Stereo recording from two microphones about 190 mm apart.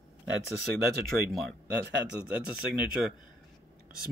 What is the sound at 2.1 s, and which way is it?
Speech, 5° right (ahead or behind).